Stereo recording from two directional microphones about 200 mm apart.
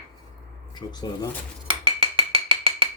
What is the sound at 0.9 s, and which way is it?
Speech, 20° left (ahead or behind).